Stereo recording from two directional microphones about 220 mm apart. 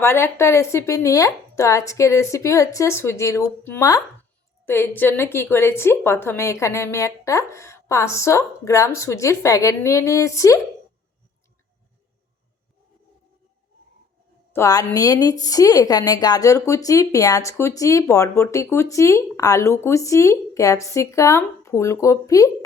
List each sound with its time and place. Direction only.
0.0 s a woman's voice: 10° left (ahead or behind)
14.5 s a woman's voice: 15° left (ahead or behind)